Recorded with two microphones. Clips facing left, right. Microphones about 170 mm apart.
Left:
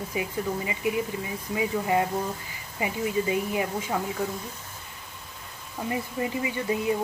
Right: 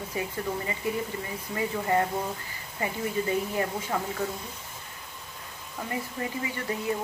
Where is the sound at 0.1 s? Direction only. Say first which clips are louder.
Left 2 dB; 15° left (ahead or behind).